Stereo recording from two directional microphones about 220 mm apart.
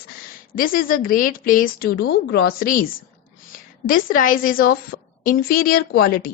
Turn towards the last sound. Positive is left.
turn(degrees=40)  # may be behind; listen again after turning